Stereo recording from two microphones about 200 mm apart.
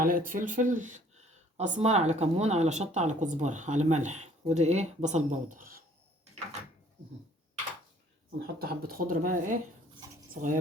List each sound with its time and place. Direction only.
0.0 s speech: 45° right (ahead or behind)
8.5 s speech: 50° right (ahead or behind)